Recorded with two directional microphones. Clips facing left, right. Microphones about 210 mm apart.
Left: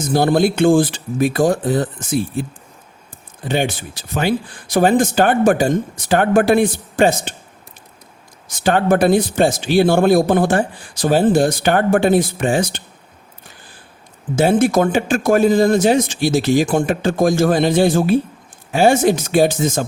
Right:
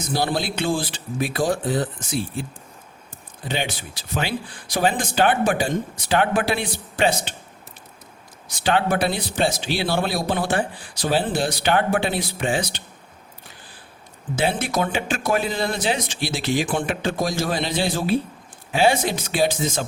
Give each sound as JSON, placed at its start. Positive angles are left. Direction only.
{"t": 0.1, "sound": "a man's voice", "side_deg": 50}
{"t": 3.4, "sound": "a man's voice", "side_deg": 50}
{"t": 8.6, "sound": "a man's voice", "side_deg": 50}
{"t": 14.3, "sound": "a man's voice", "side_deg": 45}